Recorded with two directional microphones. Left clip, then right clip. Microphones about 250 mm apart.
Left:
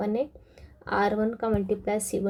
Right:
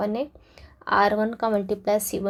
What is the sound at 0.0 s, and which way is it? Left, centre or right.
Speech, right.